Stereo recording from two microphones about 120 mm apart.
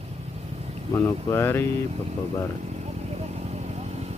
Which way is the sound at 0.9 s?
20° left (ahead or behind).